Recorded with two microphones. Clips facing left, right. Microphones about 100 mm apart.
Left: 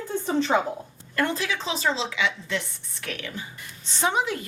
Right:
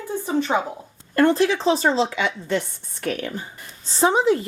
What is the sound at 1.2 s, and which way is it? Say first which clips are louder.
Speech: right 9 dB; 40° right (ahead or behind).